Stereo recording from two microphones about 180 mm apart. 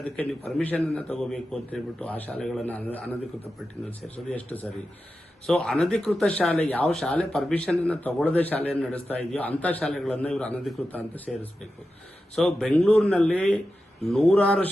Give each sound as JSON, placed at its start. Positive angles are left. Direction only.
{"t": 0.0, "sound": "speech", "side_deg": 10}
{"t": 4.3, "sound": "speech", "side_deg": 10}
{"t": 12.4, "sound": "speech", "side_deg": 0}